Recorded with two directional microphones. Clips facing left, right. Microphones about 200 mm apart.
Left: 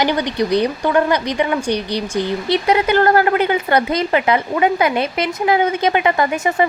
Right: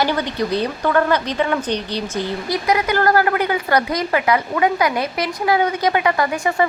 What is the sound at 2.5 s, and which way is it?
A woman's voice, 25° left (ahead or behind).